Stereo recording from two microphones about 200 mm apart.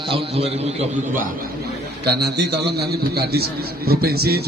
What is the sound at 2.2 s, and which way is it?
A man's voice, 55° right (ahead or behind).